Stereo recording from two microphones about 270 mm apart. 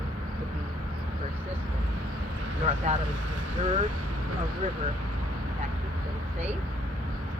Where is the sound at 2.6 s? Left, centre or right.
Right.